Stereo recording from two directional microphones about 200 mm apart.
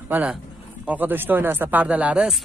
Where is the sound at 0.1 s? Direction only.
5° right (ahead or behind).